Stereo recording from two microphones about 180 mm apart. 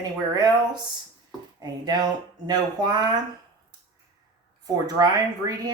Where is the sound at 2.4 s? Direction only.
20° right (ahead or behind).